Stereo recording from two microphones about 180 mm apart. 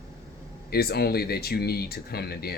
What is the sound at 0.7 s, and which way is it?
Speech, 60° left (ahead or behind).